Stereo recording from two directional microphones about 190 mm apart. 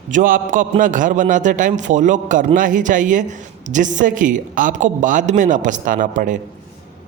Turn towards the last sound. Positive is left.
turn(degrees=-45)  # may be behind; listen again after turning